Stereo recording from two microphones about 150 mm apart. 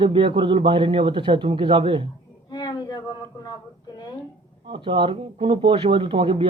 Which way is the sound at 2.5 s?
30° left (ahead or behind).